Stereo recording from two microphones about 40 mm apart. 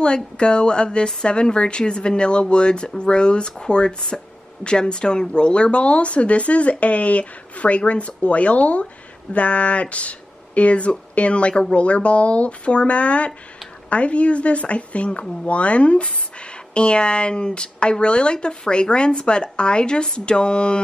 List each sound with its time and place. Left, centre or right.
0.0 s speech: left